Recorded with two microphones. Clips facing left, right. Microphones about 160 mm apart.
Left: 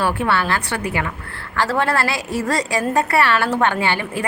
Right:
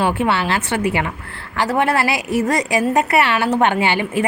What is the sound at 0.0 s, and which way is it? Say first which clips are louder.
A woman's voice: right 2 dB; 20° right (ahead or behind).